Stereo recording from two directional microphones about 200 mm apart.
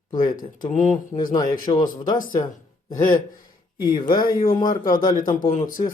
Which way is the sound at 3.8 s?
20° left (ahead or behind).